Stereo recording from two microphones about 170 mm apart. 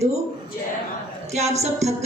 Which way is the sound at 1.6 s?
40° right (ahead or behind).